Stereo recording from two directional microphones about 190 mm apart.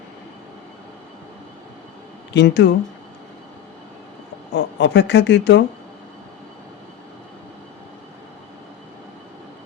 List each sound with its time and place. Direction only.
2.3 s speech: 65° left (ahead or behind)
4.5 s speech: 65° left (ahead or behind)